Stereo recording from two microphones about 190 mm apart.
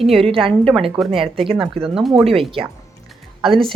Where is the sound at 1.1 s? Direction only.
30° right (ahead or behind).